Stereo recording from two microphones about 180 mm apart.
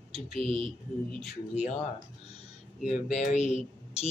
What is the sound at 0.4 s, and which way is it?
Speech, 30° right (ahead or behind).